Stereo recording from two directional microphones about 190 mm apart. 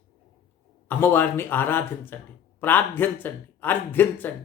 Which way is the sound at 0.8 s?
10° left (ahead or behind).